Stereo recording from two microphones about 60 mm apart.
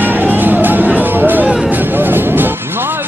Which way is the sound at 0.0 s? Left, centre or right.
Right.